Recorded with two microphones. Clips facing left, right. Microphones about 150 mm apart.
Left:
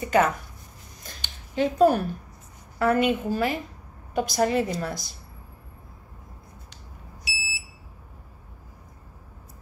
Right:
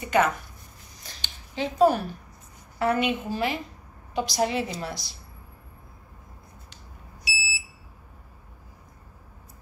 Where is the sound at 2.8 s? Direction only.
45° left (ahead or behind).